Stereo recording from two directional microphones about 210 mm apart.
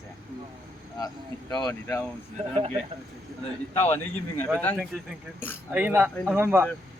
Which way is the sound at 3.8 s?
10° left (ahead or behind).